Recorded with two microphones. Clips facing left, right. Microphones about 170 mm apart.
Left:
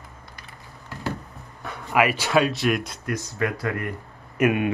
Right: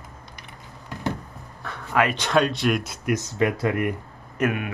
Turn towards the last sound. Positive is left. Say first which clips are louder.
# left 4 dB
turn(degrees=15)  # may be behind; listen again after turning